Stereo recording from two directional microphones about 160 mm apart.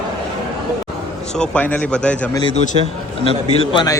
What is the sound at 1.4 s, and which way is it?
Speech, 10° left (ahead or behind).